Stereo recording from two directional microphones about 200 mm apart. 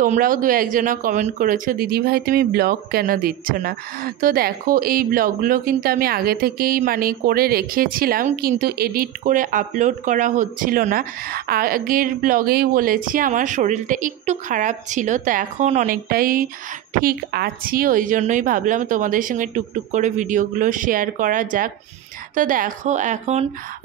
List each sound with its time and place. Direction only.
0.0 s speech: 40° right (ahead or behind)